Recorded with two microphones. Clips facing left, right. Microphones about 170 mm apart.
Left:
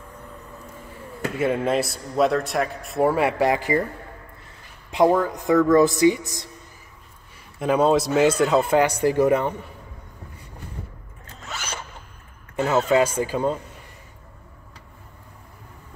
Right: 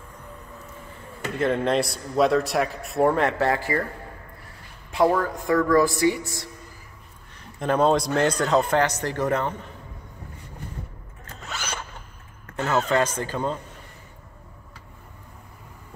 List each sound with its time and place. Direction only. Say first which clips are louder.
1.4 s a man's voice: even; 5° left (ahead or behind)
4.9 s a woman's voice: left 3 dB; 20° left (ahead or behind)
7.3 s a man's voice: left 2 dB; 5° left (ahead or behind)
12.5 s a man's voice: left 3 dB; 10° left (ahead or behind)